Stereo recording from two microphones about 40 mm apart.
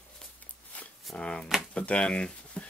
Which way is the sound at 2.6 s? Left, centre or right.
Left.